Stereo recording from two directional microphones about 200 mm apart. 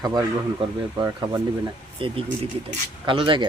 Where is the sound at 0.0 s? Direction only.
20° right (ahead or behind).